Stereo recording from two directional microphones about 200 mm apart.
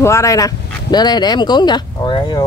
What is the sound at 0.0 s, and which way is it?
Speech, 15° left (ahead or behind).